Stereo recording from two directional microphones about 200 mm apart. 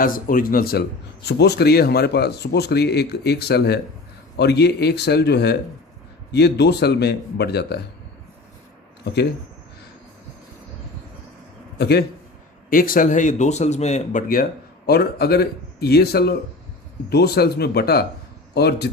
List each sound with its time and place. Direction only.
0.0 s speech: 45° left (ahead or behind)
11.8 s speech: 55° left (ahead or behind)
12.7 s speech: 45° left (ahead or behind)